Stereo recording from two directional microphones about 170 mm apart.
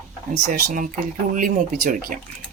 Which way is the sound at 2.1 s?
50° right (ahead or behind).